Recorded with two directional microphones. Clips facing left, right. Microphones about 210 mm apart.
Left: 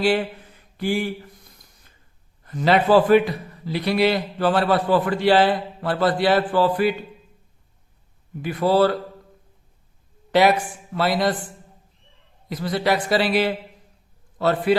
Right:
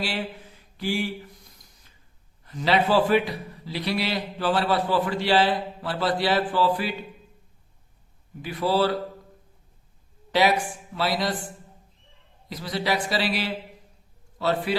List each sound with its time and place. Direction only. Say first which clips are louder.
0.8 s a man's voice: left 4 dB; 55° left (ahead or behind)
2.5 s a man's voice: left 5 dB; 50° left (ahead or behind)
8.4 s a man's voice: left 5 dB; 55° left (ahead or behind)
10.9 s a man's voice: left 5 dB; 55° left (ahead or behind)
12.5 s a man's voice: left 5 dB; 55° left (ahead or behind)